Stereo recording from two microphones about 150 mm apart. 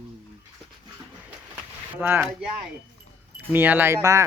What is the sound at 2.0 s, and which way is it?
Speech, 15° right (ahead or behind).